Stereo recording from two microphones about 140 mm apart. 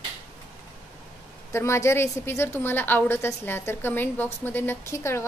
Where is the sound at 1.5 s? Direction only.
20° left (ahead or behind).